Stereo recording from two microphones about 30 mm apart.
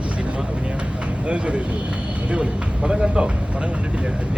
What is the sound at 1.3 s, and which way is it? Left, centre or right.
Speech, right.